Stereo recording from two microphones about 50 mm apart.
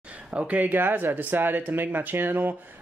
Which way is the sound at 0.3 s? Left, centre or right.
Right.